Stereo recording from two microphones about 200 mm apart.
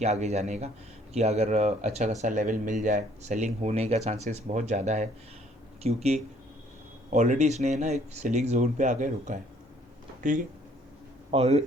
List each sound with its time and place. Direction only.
0.0 s speech: 35° right (ahead or behind)
11.3 s speech: 30° right (ahead or behind)